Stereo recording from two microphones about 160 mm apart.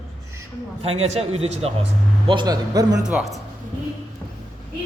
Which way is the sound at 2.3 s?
25° right (ahead or behind).